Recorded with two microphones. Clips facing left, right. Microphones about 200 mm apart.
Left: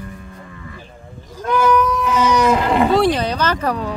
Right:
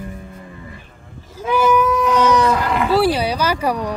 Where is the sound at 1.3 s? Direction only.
5° right (ahead or behind); by 2.9 s 25° left (ahead or behind).